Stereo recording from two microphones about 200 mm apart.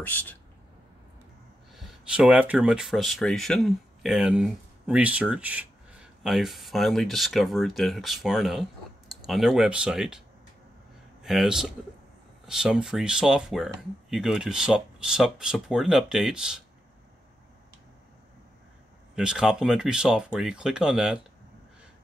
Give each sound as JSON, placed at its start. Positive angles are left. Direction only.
{"t": 0.0, "sound": "speech", "side_deg": 10}
{"t": 1.8, "sound": "speech", "side_deg": -5}
{"t": 11.2, "sound": "speech", "side_deg": 0}
{"t": 19.1, "sound": "speech", "side_deg": -5}